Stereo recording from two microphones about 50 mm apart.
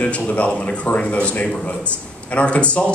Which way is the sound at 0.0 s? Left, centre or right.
Left.